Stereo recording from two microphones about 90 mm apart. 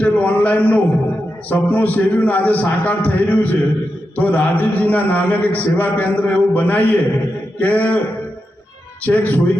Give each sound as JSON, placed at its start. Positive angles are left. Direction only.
{"t": 0.0, "sound": "a sound", "side_deg": 15}
{"t": 1.5, "sound": "a man's voice", "side_deg": 15}
{"t": 9.0, "sound": "a man's voice", "side_deg": 15}